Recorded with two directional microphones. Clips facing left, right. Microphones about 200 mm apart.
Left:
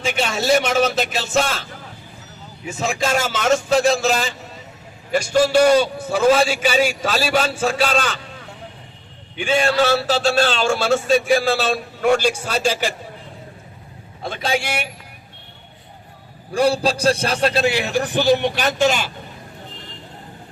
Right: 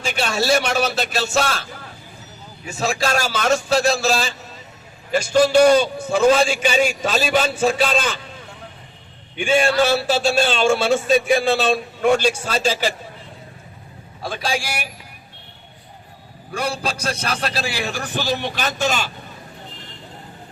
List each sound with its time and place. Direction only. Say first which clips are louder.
0.0 s a man's voice: left 1 dB; 20° left (ahead or behind)
2.6 s a man's voice: even; 20° left (ahead or behind); by 8.2 s centre (ahead or behind)
10.2 s a man's voice: right 2 dB; 5° right (ahead or behind); by 12.9 s 10° left (ahead or behind)
14.2 s a man's voice: left 2 dB; 20° left (ahead or behind)
16.6 s a man's voice: left 7 dB; 30° left (ahead or behind); by 19.0 s 15° left (ahead or behind)